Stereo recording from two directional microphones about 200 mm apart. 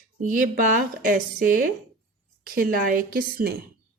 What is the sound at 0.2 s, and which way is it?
A woman's voice, 40° right (ahead or behind).